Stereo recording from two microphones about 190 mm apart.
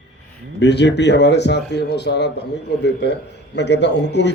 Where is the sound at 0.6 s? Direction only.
65° left (ahead or behind).